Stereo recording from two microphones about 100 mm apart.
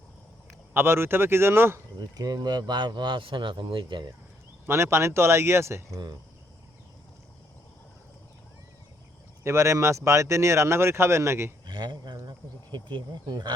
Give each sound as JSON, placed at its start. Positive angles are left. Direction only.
{"t": 0.7, "sound": "speech", "side_deg": -25}
{"t": 2.0, "sound": "speech", "side_deg": -40}
{"t": 4.6, "sound": "speech", "side_deg": -25}
{"t": 9.4, "sound": "speech", "side_deg": -30}
{"t": 11.6, "sound": "speech", "side_deg": -50}